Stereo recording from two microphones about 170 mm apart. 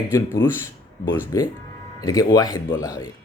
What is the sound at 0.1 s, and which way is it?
Speech, 20° left (ahead or behind).